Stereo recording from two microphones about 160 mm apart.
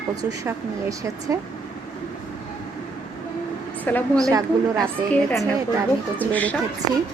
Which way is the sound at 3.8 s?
10° left (ahead or behind).